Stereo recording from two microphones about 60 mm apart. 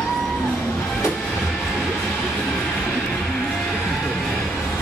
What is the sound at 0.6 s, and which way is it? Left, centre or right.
Music, left.